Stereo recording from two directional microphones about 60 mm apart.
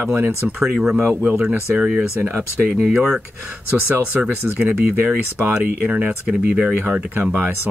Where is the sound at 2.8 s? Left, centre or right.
Centre.